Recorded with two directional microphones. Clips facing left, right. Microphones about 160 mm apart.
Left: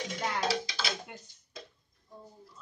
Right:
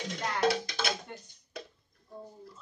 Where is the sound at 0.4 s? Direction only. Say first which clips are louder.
Right 7 dB; 55° right (ahead or behind).